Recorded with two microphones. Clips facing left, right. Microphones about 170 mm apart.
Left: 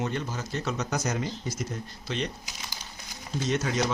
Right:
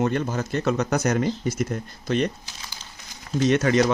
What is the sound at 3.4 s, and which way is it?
Speech, 70° right (ahead or behind).